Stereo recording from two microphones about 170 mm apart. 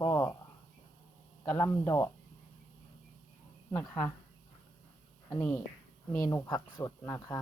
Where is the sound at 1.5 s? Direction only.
15° left (ahead or behind).